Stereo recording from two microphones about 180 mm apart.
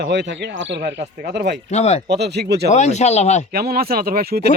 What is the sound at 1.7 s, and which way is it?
Speech, 40° left (ahead or behind).